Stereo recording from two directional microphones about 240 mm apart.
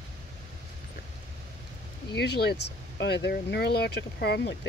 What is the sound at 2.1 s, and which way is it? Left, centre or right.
Speech, left.